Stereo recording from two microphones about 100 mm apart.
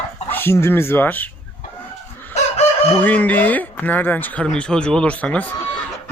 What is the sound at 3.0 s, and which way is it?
Speech, 15° left (ahead or behind).